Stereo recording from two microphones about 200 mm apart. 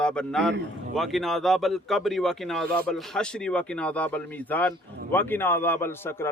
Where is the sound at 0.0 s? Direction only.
5° left (ahead or behind).